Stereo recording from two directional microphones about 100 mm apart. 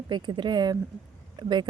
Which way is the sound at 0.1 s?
50° right (ahead or behind).